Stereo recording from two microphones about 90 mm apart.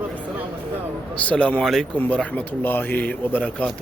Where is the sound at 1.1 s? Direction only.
15° left (ahead or behind).